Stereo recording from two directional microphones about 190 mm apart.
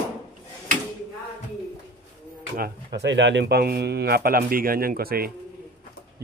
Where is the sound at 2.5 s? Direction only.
55° right (ahead or behind).